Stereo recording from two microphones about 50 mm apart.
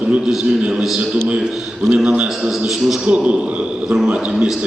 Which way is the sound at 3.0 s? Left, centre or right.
Right.